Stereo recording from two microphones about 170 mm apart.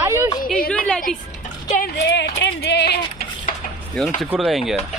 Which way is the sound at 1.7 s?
75° left (ahead or behind).